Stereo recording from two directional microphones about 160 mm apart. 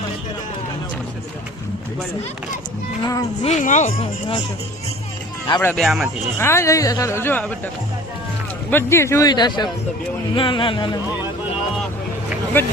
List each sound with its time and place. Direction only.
3.0 s speech: 20° left (ahead or behind)
3.4 s speech: 50° left (ahead or behind)
5.5 s speech: 5° left (ahead or behind)
6.4 s a woman's voice: 15° left (ahead or behind)
8.7 s speech: 15° left (ahead or behind)